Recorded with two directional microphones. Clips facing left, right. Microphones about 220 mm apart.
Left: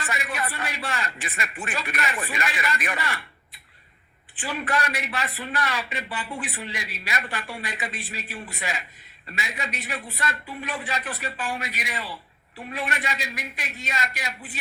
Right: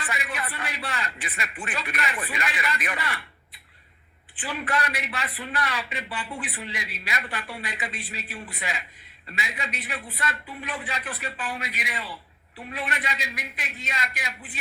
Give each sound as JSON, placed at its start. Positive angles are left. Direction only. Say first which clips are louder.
{"t": 0.0, "sound": "a man's voice", "louder": "left 3 dB", "side_deg": 45}